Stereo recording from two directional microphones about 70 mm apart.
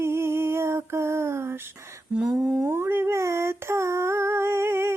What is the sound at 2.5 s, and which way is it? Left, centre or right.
Female singing, right.